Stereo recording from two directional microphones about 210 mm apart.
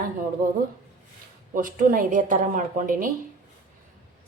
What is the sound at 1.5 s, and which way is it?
A woman's voice, 40° right (ahead or behind).